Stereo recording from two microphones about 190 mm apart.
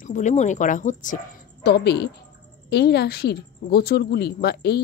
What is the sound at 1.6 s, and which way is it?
A woman's voice, 60° left (ahead or behind).